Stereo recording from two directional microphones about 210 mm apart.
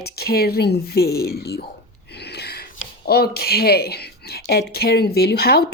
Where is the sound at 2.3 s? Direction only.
50° left (ahead or behind).